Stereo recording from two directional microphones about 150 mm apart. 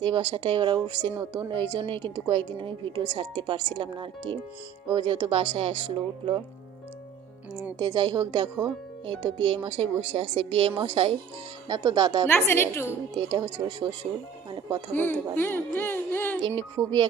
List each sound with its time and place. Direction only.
0.0 s speech: 30° right (ahead or behind)
7.8 s speech: 25° right (ahead or behind)
12.3 s speech: 15° left (ahead or behind)
13.1 s speech: 25° right (ahead or behind)
14.9 s speech: 15° left (ahead or behind)
16.6 s speech: 30° right (ahead or behind)